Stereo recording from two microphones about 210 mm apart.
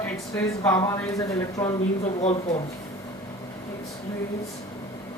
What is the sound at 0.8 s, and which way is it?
Speech, 15° left (ahead or behind).